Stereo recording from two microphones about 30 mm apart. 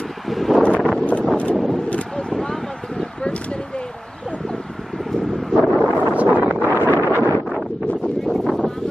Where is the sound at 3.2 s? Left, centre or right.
Left.